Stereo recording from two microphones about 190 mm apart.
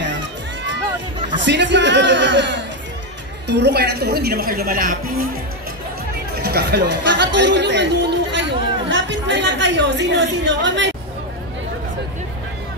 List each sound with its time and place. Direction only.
1.4 s a man's voice: 70° right (ahead or behind); by 5.2 s 50° right (ahead or behind)
6.4 s chatter: 60° right (ahead or behind)